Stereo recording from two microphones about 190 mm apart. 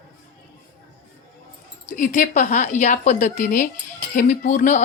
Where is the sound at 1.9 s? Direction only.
40° left (ahead or behind).